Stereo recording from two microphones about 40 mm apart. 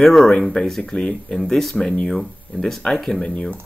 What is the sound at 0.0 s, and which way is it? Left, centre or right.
Speech, centre.